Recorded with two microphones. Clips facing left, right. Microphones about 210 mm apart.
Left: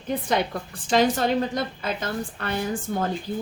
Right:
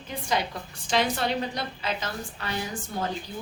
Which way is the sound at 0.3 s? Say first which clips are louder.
Left 1 dB; 55° left (ahead or behind).